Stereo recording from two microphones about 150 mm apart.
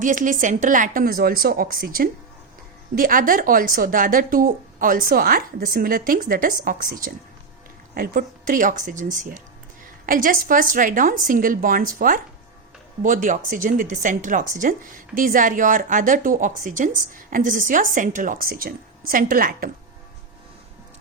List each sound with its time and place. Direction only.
0.0 s a woman's voice: 60° right (ahead or behind)